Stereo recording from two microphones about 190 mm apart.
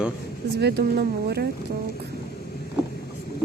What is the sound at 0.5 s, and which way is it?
Speech, 60° right (ahead or behind).